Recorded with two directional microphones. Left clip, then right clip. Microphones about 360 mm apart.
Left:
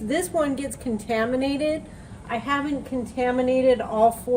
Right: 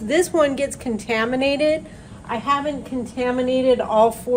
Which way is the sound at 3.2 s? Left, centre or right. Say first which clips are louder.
Right 1 dB; centre.